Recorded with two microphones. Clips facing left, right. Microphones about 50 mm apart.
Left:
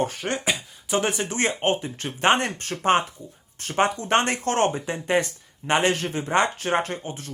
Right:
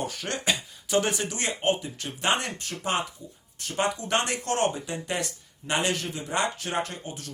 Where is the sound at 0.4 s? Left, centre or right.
Centre.